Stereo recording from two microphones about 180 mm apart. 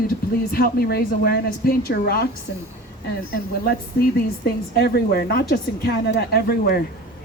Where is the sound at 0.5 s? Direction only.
60° left (ahead or behind).